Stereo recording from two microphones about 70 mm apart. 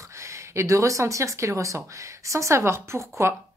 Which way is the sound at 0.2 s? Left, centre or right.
Right.